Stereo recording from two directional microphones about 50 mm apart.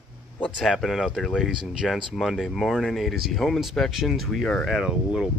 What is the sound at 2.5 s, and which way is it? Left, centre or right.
Speech, centre.